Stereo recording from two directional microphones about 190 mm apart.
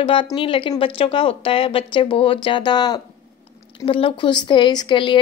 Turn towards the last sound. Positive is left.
turn(degrees=25)  # may be behind; listen again after turning